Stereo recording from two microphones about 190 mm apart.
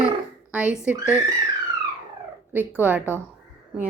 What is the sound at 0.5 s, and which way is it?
Speech, 5° right (ahead or behind).